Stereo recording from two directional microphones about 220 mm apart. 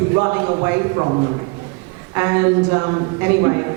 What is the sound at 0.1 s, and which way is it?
Speech, 20° right (ahead or behind).